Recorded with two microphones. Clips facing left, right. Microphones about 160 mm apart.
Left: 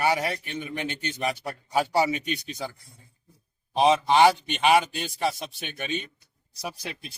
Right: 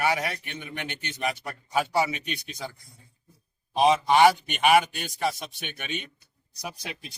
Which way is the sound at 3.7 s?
30° left (ahead or behind).